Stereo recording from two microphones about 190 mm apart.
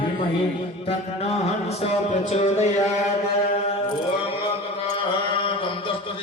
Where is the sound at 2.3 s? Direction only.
35° left (ahead or behind).